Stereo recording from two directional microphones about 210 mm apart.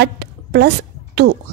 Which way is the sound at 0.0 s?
50° right (ahead or behind).